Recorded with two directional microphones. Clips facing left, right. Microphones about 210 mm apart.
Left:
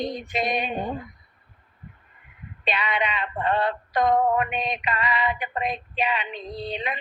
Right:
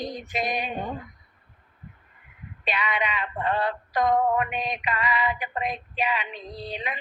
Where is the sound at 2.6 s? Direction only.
25° left (ahead or behind).